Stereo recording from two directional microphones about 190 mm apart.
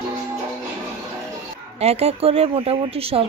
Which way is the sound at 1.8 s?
35° right (ahead or behind).